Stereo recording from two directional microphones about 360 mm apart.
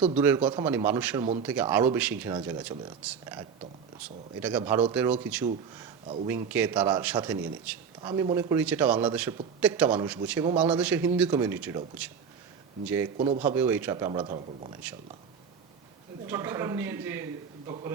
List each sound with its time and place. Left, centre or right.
0.2 s a man's voice: centre
13.1 s a man's voice: centre
13.4 s a man's voice: centre
16.2 s a man's voice: centre